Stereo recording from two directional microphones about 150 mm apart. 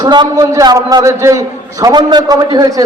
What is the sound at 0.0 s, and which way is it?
A man's voice, 25° right (ahead or behind).